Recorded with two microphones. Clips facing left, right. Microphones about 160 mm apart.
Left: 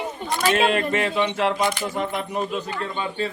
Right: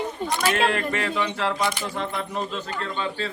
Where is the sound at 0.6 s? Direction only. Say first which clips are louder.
Left 3 dB; 20° left (ahead or behind).